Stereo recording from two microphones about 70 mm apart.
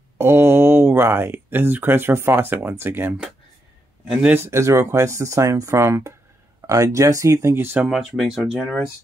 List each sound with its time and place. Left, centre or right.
0.2 s speech: right
4.4 s speech: right
6.6 s speech: right
7.9 s speech: centre